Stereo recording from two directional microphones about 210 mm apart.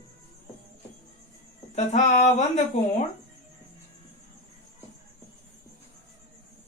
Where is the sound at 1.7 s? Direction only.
35° left (ahead or behind).